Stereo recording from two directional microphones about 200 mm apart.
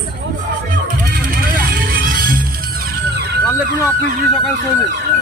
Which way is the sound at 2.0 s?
45° right (ahead or behind).